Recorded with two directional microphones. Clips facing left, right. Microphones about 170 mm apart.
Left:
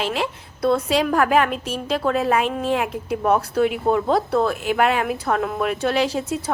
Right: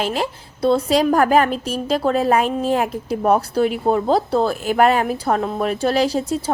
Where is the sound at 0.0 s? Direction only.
40° right (ahead or behind).